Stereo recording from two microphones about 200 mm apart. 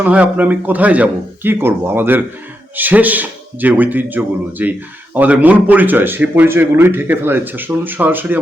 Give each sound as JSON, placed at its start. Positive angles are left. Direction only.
{"t": 0.0, "sound": "speech", "side_deg": -10}